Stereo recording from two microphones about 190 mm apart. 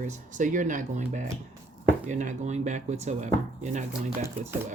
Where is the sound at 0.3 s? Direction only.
40° right (ahead or behind).